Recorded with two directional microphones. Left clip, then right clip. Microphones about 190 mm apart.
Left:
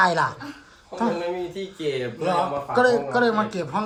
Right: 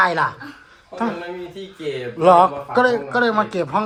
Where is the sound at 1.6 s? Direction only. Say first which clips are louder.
Left 1 dB; centre (ahead or behind).